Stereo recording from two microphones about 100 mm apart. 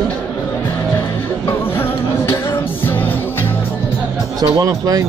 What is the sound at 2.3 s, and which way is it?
Music, 25° left (ahead or behind).